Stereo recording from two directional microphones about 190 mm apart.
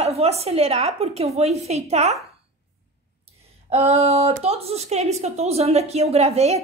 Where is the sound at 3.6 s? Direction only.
35° right (ahead or behind).